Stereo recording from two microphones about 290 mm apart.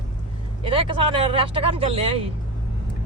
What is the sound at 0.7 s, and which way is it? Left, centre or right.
Speech, centre.